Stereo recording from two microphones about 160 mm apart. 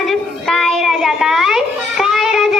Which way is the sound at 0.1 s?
Centre (ahead or behind).